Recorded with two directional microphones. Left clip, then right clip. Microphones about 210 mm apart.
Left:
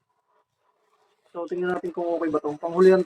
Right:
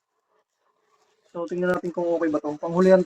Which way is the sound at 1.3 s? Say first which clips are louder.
Right 2 dB; 40° right (ahead or behind).